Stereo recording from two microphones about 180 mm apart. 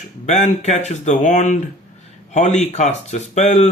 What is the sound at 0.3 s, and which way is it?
Speech, 40° left (ahead or behind).